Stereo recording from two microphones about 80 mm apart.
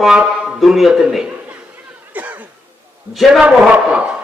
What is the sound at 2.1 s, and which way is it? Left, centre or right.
Cough, centre.